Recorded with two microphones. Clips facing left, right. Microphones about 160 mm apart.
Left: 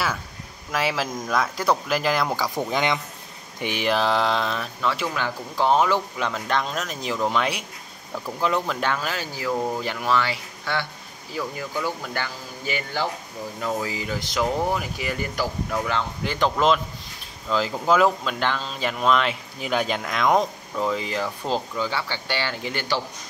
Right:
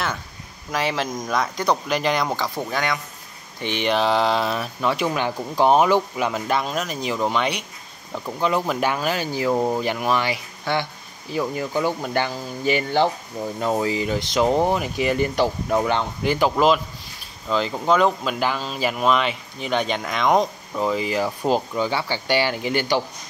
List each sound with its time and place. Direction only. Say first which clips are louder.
0.7 s speech: right 1 dB; centre (ahead or behind); by 3.0 s 20° left (ahead or behind)
3.6 s speech: right 2 dB; 5° left (ahead or behind)
8.6 s speech: right 4 dB; 10° right (ahead or behind)
16.3 s speech: right 2 dB; 5° right (ahead or behind)